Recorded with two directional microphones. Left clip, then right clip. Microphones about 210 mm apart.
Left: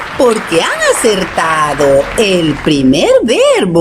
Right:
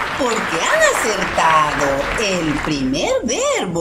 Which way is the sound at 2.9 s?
45° left (ahead or behind).